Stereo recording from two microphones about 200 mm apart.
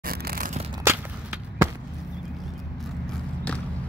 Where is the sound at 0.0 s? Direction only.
50° right (ahead or behind).